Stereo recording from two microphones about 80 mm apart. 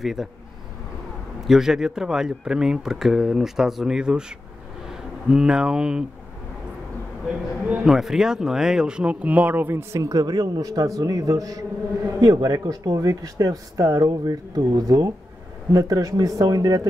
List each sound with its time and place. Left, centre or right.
0.0 s speech: centre
1.4 s speech: centre
7.2 s a sound: centre
7.9 s speech: centre; by 9.8 s right
9.9 s speech: right